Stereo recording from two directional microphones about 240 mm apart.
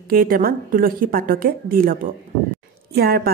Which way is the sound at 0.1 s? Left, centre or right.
Right.